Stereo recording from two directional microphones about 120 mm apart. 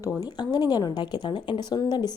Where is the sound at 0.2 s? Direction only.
35° left (ahead or behind).